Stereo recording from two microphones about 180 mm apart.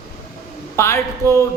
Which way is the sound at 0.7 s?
15° left (ahead or behind).